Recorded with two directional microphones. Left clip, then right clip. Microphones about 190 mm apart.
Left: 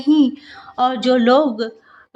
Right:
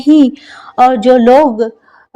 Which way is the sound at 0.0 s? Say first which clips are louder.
Right 7 dB; 40° right (ahead or behind).